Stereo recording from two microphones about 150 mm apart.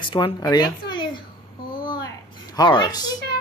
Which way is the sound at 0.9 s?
30° left (ahead or behind).